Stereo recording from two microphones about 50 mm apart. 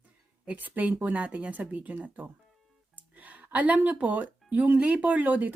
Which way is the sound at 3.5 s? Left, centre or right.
Right.